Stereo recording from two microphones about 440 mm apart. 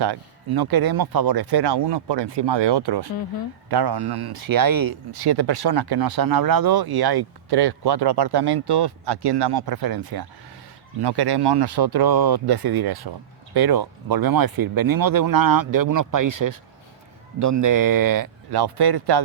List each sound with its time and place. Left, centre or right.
0.0 s speech: right